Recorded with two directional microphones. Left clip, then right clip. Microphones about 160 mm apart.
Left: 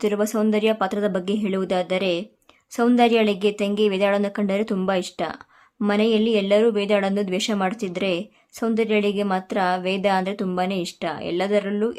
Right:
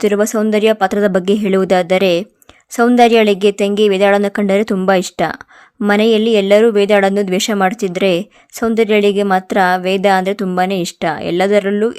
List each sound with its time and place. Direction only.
0.0 s speech: 35° right (ahead or behind)